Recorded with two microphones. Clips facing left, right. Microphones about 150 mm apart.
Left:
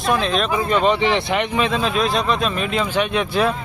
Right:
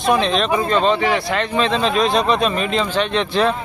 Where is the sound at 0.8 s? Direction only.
20° left (ahead or behind).